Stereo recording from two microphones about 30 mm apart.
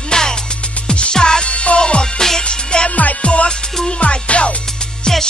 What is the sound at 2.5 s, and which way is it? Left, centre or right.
Music, left.